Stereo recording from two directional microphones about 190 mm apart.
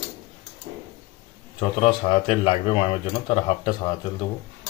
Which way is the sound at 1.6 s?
30° left (ahead or behind).